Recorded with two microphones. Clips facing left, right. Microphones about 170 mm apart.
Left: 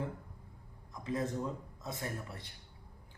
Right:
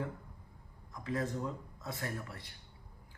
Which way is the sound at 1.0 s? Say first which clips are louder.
Left 1 dB; 20° left (ahead or behind).